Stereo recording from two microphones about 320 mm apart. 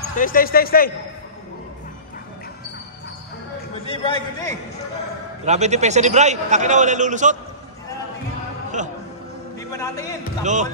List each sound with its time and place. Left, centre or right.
0.1 s speech: left
3.8 s a man's voice: centre
5.4 s a man's voice: right
9.6 s a man's voice: centre
10.4 s a man's voice: right